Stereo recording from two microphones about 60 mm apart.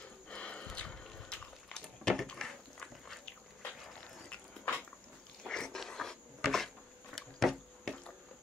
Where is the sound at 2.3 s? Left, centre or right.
Centre.